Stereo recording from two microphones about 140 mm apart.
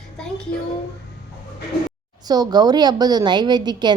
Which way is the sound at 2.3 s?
30° right (ahead or behind).